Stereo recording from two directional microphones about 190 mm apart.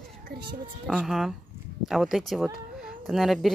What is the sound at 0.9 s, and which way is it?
Speech, centre (ahead or behind).